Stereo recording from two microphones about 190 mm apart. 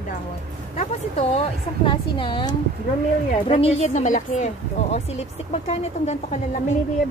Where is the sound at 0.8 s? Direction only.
35° left (ahead or behind).